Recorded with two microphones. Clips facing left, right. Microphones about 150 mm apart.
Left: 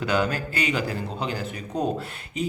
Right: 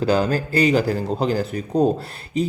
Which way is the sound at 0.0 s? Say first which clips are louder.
Right 5 dB; 35° right (ahead or behind).